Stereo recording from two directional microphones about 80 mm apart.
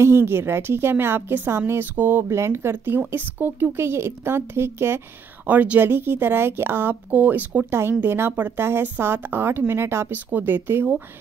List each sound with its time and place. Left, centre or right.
0.0 s speech: right
2.2 s speech: right
5.5 s speech: right